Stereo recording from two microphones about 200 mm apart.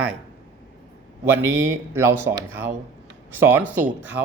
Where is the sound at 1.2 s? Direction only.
15° right (ahead or behind).